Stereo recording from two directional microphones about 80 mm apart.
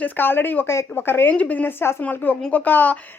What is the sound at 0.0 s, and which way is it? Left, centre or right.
A woman's voice, left.